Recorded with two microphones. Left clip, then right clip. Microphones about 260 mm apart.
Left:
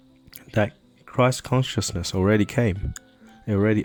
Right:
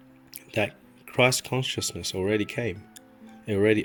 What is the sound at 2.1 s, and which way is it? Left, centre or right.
Speech, left.